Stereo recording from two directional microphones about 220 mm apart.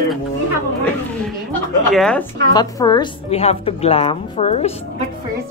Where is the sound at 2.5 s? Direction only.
15° left (ahead or behind).